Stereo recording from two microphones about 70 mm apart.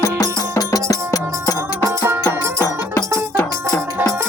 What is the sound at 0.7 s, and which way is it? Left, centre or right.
Music, left.